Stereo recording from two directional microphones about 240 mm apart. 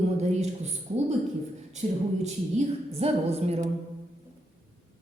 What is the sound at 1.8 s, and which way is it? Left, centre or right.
A woman's voice, right.